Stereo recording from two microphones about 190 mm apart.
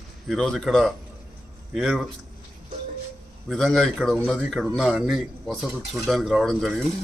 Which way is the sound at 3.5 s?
Centre (ahead or behind).